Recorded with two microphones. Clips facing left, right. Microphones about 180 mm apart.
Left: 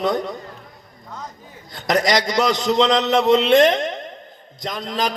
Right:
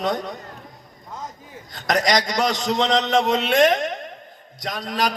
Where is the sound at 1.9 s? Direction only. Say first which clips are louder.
Left 2 dB; 25° left (ahead or behind).